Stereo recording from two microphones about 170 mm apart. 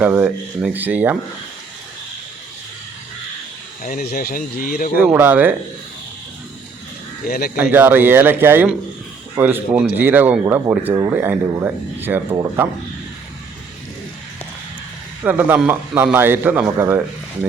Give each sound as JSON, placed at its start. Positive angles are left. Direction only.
{"t": 0.0, "sound": "speech", "side_deg": -10}
{"t": 3.8, "sound": "speech", "side_deg": 60}
{"t": 4.9, "sound": "speech", "side_deg": -10}
{"t": 7.3, "sound": "speech", "side_deg": 60}
{"t": 7.5, "sound": "speech", "side_deg": -10}
{"t": 15.2, "sound": "speech", "side_deg": -10}